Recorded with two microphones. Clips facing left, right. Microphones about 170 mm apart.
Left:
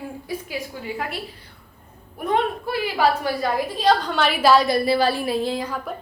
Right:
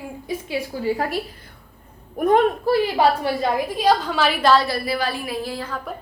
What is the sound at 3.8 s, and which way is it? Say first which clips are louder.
Speech: even; 10° right (ahead or behind).